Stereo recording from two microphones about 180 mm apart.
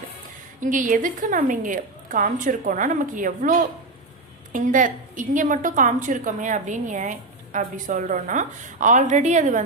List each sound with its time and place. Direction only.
0.6 s a woman's voice: 45° right (ahead or behind)